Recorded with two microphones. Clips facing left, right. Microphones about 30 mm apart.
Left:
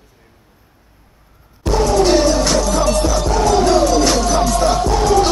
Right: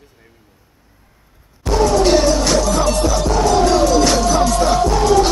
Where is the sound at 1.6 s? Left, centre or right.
Centre.